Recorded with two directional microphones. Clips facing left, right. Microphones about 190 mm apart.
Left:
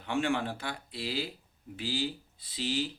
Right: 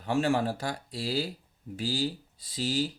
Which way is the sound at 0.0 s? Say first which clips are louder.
Right 4 dB; 40° right (ahead or behind).